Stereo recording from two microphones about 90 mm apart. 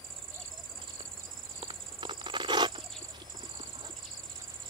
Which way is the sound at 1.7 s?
60° right (ahead or behind).